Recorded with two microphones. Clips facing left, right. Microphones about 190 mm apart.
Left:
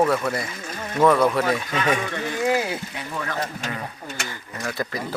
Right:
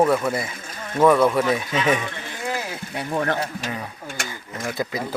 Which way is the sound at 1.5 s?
25° right (ahead or behind).